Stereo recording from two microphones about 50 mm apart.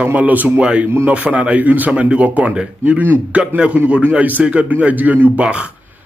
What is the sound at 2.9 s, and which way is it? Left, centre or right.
A man's voice, right.